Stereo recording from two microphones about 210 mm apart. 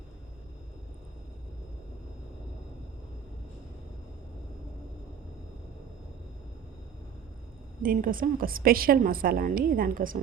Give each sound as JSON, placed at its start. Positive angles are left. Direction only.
{"t": 7.8, "sound": "a woman's voice", "side_deg": -40}